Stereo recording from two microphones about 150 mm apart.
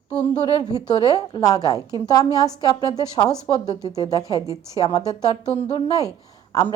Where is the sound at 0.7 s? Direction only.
25° left (ahead or behind).